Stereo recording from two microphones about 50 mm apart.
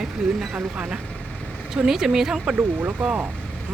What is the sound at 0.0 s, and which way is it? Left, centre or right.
Speech, centre.